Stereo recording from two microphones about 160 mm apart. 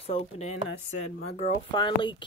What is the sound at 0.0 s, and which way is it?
Speech, 45° left (ahead or behind).